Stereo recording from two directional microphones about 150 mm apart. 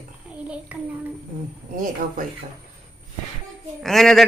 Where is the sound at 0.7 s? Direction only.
10° right (ahead or behind).